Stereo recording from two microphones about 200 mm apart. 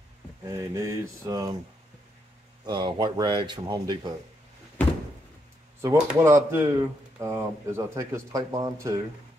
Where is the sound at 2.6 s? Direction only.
20° right (ahead or behind).